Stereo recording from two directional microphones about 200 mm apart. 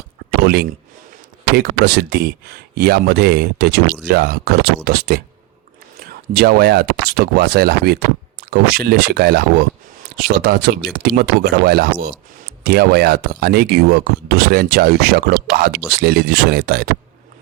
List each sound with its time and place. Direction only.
0.4 s a man's voice: 50° right (ahead or behind)